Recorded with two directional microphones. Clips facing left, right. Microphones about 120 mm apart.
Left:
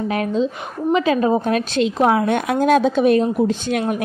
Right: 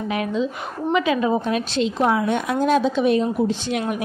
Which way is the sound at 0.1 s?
40° left (ahead or behind).